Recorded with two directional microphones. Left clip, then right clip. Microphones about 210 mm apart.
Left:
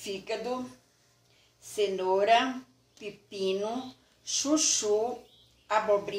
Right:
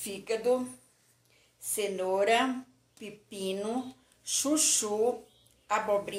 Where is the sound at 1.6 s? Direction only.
25° right (ahead or behind).